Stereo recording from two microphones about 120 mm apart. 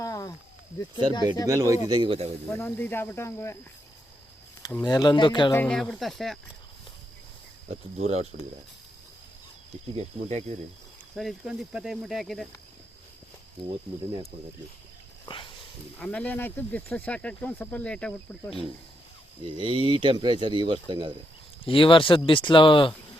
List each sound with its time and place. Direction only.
0.0 s a sound: 30° left (ahead or behind)
1.5 s speech: 25° right (ahead or behind)
1.9 s speech: 45° right (ahead or behind)
2.5 s speech: 15° left (ahead or behind)
4.8 s speech: 35° left (ahead or behind)
5.6 s speech: centre (ahead or behind)
7.9 s speech: 65° right (ahead or behind)
9.9 s speech: 60° right (ahead or behind)
11.1 s speech: centre (ahead or behind)
13.6 s speech: 40° right (ahead or behind)
15.3 s a sound: 40° left (ahead or behind)
16.0 s speech: 10° left (ahead or behind)
19.5 s speech: 45° right (ahead or behind)
21.6 s speech: 45° left (ahead or behind)